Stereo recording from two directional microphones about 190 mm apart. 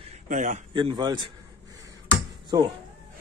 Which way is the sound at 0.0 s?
40° right (ahead or behind).